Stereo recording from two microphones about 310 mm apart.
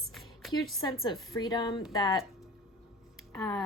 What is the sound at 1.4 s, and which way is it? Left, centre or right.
Speech, centre.